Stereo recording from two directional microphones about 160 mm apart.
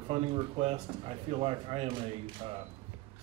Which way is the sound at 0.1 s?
35° right (ahead or behind).